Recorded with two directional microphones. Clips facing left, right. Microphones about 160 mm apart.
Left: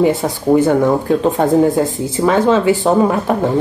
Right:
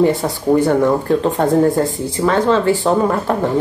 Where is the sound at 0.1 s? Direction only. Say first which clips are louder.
Left 2 dB; centre (ahead or behind).